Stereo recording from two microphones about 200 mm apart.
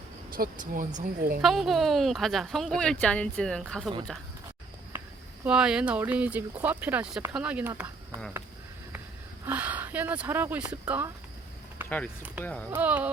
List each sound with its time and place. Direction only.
0.3 s speech: 45° right (ahead or behind)
1.4 s speech: centre (ahead or behind)
5.5 s speech: 5° right (ahead or behind)
9.5 s speech: 10° right (ahead or behind)
11.8 s a sound: 10° right (ahead or behind)
12.7 s speech: 10° right (ahead or behind)